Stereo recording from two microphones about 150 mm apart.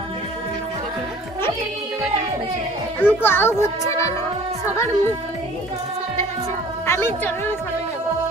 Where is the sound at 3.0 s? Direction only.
15° left (ahead or behind).